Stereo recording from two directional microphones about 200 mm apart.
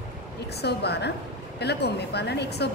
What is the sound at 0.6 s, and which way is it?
Speech, 55° left (ahead or behind).